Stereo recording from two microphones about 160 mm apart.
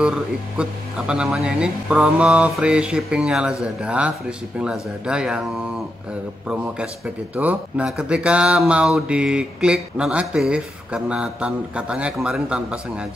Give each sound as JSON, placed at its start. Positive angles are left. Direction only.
{"t": 0.0, "sound": "speech", "side_deg": -5}
{"t": 7.3, "sound": "speech", "side_deg": -10}